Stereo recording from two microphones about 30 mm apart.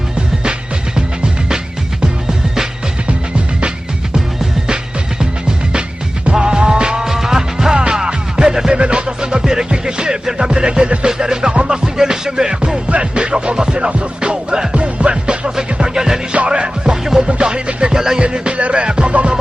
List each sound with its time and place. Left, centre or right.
2.0 s music: right
5.2 s music: right
7.1 s music: centre
7.8 s music: right
8.7 s music: right
12.9 s music: right
14.8 s music: right
15.1 s music: right
15.5 s music: right
17.2 s music: right
18.9 s music: right